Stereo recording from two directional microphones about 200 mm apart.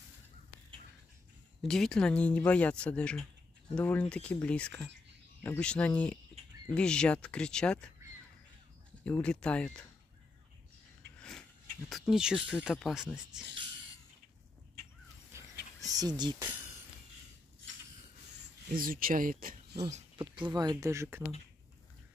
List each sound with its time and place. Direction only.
1.6 s speech: centre (ahead or behind)
9.0 s speech: 5° left (ahead or behind)
11.1 s a sound: 5° left (ahead or behind)
11.9 s speech: centre (ahead or behind)
15.9 s speech: 20° right (ahead or behind)
18.8 s speech: 45° right (ahead or behind)
19.8 s speech: 30° right (ahead or behind)